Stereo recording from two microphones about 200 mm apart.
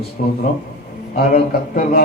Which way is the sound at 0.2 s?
45° left (ahead or behind).